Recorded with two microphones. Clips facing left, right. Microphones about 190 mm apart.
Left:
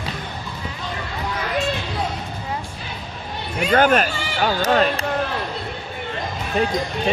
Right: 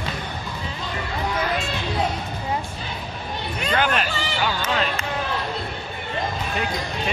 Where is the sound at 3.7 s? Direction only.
45° left (ahead or behind).